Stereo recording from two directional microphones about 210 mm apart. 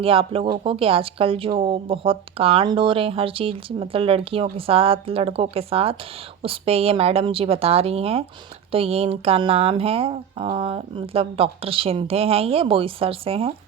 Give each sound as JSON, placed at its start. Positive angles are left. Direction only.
{"t": 0.0, "sound": "speech", "side_deg": -25}